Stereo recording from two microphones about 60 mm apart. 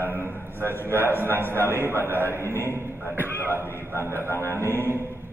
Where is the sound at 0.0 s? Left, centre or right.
Left.